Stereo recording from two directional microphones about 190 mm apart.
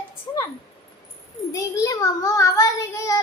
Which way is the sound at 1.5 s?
15° left (ahead or behind).